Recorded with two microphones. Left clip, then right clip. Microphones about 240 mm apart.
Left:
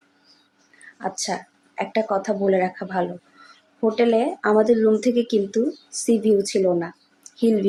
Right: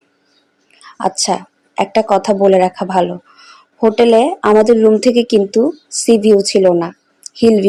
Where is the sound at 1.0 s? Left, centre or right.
Right.